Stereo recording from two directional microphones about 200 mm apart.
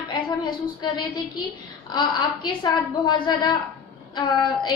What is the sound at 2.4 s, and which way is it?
A woman's voice, 20° left (ahead or behind).